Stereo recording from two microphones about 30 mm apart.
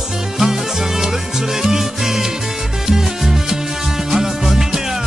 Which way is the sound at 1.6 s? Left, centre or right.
Centre.